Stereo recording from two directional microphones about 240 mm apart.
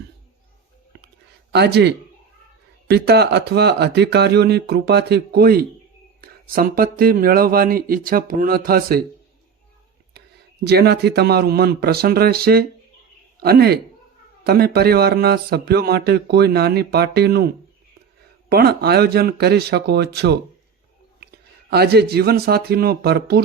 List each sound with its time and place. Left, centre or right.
1.5 s speech: right
10.2 s speech: right
18.4 s speech: right
21.7 s speech: right